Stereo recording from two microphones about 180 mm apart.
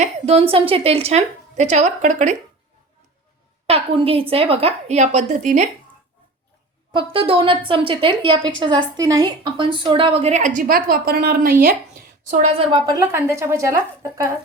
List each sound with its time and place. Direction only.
0.0 s a woman's voice: 35° right (ahead or behind)
3.7 s a woman's voice: 35° right (ahead or behind)
6.9 s a woman's voice: 30° right (ahead or behind); by 11.7 s 55° right (ahead or behind)
12.3 s a woman's voice: 35° right (ahead or behind)
12.8 s speech: 20° right (ahead or behind)